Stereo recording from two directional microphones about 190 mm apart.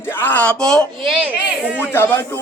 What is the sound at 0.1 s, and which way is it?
Speech, 10° left (ahead or behind).